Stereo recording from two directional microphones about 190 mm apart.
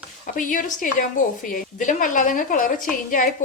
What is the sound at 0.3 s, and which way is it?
A woman's voice, 45° left (ahead or behind).